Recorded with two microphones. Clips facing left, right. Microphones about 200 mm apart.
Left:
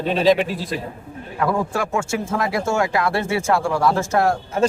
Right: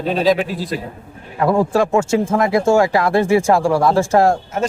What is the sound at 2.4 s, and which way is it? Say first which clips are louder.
Speech: right 7 dB; 25° right (ahead or behind).